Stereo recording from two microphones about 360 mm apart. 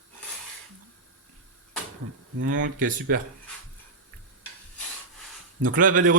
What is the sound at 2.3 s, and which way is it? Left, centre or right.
Speech, right.